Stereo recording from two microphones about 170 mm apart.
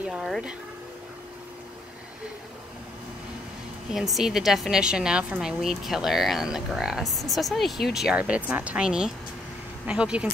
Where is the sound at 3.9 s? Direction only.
Centre (ahead or behind).